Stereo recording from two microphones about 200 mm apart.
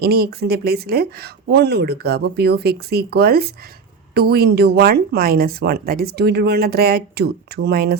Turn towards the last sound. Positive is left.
turn(degrees=-50)  # may be behind; listen again after turning